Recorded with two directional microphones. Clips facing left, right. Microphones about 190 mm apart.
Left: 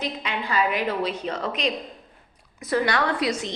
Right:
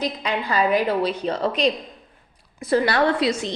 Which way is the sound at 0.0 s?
40° right (ahead or behind).